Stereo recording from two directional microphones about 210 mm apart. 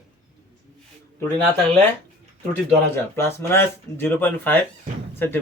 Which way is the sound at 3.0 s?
10° left (ahead or behind).